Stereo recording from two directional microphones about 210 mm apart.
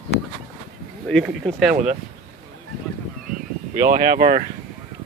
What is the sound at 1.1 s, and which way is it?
Speech, centre (ahead or behind).